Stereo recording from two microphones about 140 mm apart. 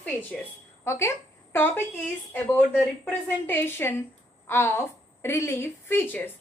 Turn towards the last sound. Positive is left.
turn(degrees=15)  # may be behind; listen again after turning